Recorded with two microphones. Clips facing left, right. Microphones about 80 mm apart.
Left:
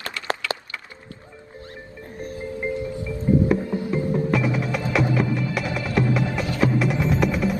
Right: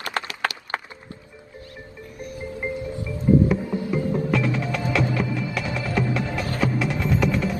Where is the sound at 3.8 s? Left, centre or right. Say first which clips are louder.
Even; left.